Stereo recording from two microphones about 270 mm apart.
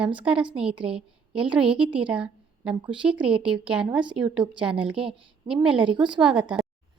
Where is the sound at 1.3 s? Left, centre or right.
Centre.